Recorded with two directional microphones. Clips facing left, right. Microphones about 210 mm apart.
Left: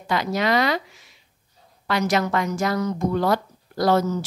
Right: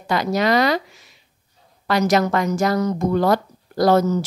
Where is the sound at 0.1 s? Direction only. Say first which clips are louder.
Right 3 dB; 40° right (ahead or behind).